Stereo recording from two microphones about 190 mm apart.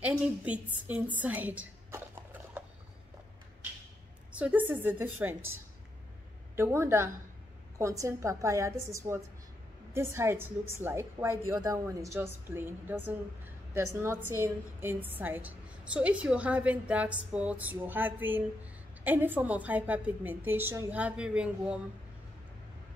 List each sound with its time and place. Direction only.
0.0 s a woman's voice: 5° right (ahead or behind)
0.8 s a sound: 10° right (ahead or behind)
4.3 s a woman's voice: 10° right (ahead or behind)
14.4 s a woman's voice: 10° right (ahead or behind)